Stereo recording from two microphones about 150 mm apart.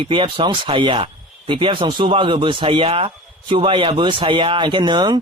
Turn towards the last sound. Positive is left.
turn(degrees=-30)  # may be behind; listen again after turning